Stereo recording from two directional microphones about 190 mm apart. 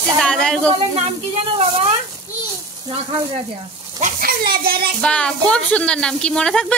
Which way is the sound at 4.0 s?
50° right (ahead or behind).